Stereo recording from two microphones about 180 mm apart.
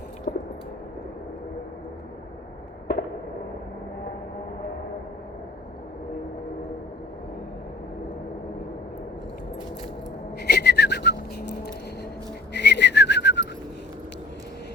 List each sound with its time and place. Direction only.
0.3 s a sound: 60° left (ahead or behind)
10.4 s whistling: 65° left (ahead or behind)
12.5 s whistling: 70° left (ahead or behind)